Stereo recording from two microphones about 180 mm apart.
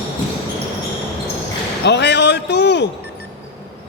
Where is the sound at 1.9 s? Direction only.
70° left (ahead or behind).